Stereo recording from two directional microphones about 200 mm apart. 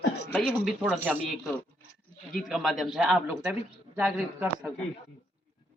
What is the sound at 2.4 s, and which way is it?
A man's voice, centre (ahead or behind).